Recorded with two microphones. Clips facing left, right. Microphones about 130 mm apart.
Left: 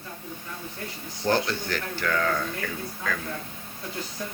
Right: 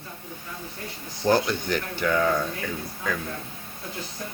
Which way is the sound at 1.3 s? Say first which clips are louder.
Right 3 dB; 15° right (ahead or behind).